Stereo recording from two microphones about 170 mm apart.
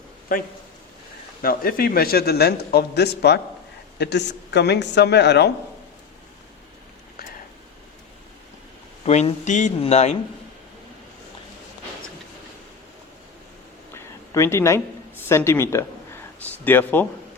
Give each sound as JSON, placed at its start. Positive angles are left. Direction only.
{"t": 1.4, "sound": "a man's voice", "side_deg": 60}
{"t": 3.9, "sound": "speech", "side_deg": 90}
{"t": 9.0, "sound": "speech", "side_deg": 40}
{"t": 13.9, "sound": "a sound", "side_deg": 15}
{"t": 16.6, "sound": "speech", "side_deg": 10}